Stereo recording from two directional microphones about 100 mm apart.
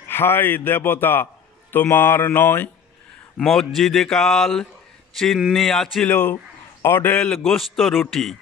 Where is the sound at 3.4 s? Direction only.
Centre (ahead or behind).